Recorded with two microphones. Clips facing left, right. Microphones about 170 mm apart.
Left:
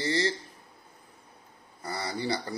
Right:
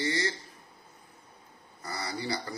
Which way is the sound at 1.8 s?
30° left (ahead or behind).